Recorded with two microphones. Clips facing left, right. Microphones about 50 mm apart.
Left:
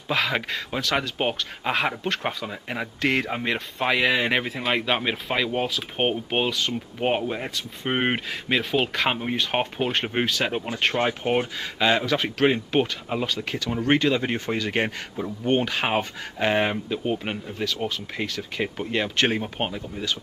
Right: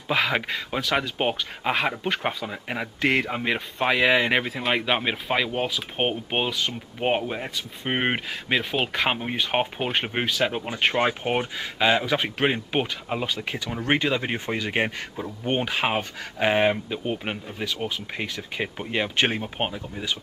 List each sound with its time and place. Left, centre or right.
0.1 s speech: centre